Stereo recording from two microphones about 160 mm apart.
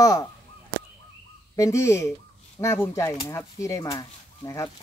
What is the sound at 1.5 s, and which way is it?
Speech, 20° left (ahead or behind).